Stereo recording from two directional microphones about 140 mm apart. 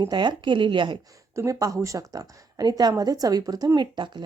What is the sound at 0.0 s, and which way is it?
Speech, 35° right (ahead or behind).